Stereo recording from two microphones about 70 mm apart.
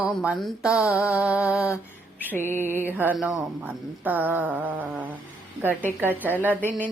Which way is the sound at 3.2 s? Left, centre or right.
Centre.